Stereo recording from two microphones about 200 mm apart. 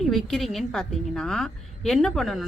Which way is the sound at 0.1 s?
Centre (ahead or behind).